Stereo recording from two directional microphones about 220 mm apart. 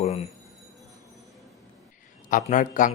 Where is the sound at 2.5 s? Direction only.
35° left (ahead or behind).